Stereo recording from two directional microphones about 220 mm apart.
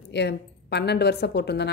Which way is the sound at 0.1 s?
50° left (ahead or behind).